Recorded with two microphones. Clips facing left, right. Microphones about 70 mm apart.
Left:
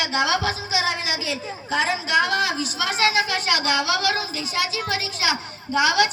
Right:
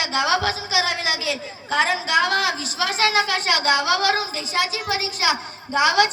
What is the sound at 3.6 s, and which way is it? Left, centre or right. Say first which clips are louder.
A woman's voice: right 5 dB; right.